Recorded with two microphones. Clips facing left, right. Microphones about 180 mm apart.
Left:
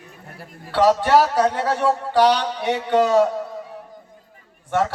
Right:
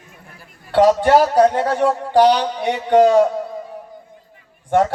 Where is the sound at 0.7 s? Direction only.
50° right (ahead or behind).